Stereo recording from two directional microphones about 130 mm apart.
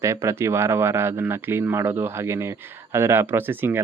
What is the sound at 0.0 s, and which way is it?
Speech, 20° right (ahead or behind).